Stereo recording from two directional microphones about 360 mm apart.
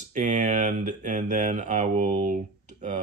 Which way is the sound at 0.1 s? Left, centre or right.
Centre.